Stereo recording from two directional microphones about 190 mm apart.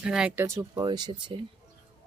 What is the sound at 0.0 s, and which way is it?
Speech, 5° right (ahead or behind).